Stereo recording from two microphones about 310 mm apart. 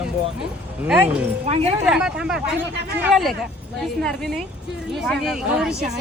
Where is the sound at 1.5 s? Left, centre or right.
Centre.